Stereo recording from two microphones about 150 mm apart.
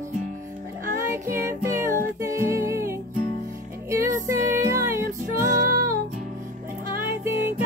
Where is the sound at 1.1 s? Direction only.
20° right (ahead or behind).